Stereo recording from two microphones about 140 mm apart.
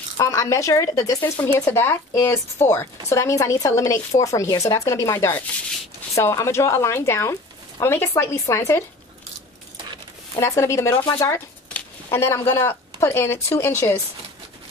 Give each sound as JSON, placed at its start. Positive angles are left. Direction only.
{"t": 0.2, "sound": "speech", "side_deg": 25}
{"t": 10.4, "sound": "speech", "side_deg": 20}